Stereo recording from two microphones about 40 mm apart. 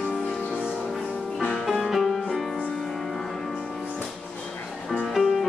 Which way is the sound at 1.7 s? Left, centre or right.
Centre.